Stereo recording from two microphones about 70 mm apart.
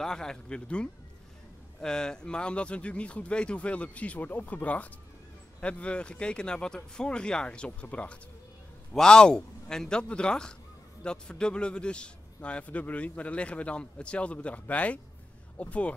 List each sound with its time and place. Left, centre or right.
0.0 s a man's voice: centre